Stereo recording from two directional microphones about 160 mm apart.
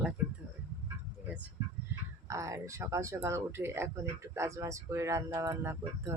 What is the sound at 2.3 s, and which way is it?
Speech, 20° right (ahead or behind).